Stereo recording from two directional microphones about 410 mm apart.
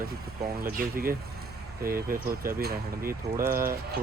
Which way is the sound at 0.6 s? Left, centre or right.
Right.